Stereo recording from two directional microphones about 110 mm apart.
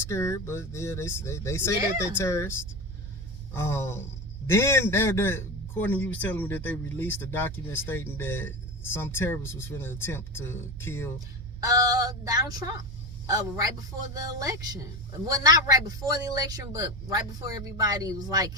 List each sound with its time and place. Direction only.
0.1 s a man's voice: 25° left (ahead or behind)
11.6 s speech: 35° right (ahead or behind)